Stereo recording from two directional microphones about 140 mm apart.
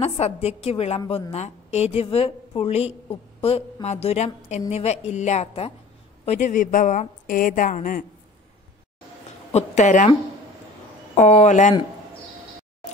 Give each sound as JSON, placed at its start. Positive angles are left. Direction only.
{"t": 0.0, "sound": "a woman's voice", "side_deg": 45}
{"t": 9.5, "sound": "a woman's voice", "side_deg": 55}
{"t": 11.1, "sound": "a woman's voice", "side_deg": 55}